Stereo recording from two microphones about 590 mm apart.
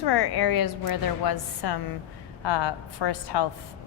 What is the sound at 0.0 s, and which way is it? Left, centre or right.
A woman's voice, left.